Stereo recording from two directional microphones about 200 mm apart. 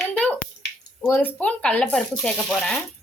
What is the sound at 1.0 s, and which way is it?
A woman's voice, 10° left (ahead or behind).